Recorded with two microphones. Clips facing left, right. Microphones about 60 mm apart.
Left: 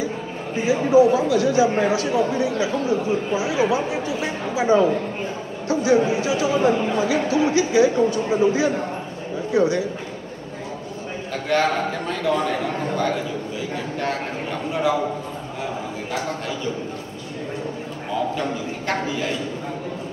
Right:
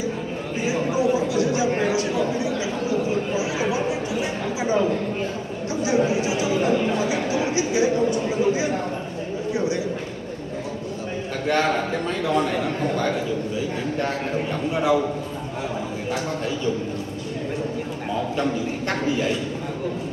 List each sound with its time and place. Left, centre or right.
0.6 s speech: left
11.4 s a man's voice: right
12.1 s speech: left